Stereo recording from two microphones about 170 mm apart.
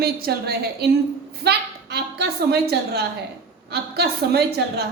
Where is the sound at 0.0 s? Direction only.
65° right (ahead or behind).